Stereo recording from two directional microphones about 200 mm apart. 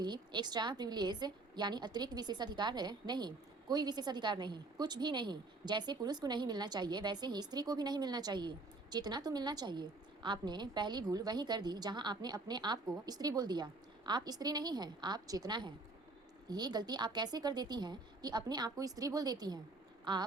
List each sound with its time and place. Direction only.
0.0 s a woman's voice: 20° right (ahead or behind)